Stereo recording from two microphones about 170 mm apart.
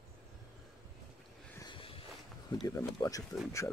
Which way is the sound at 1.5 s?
30° left (ahead or behind).